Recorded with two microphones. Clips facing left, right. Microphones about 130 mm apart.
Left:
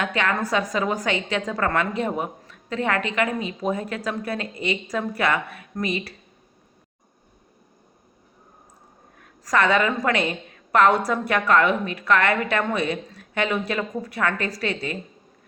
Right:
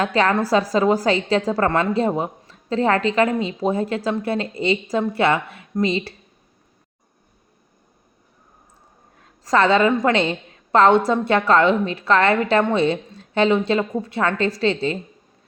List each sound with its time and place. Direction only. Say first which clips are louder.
0.0 s a woman's voice: right 5 dB; 35° right (ahead or behind)
9.2 s a woman's voice: right 4 dB; 25° right (ahead or behind)